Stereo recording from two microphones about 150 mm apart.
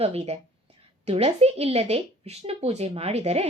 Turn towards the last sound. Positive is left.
turn(degrees=-45)  # may be behind; listen again after turning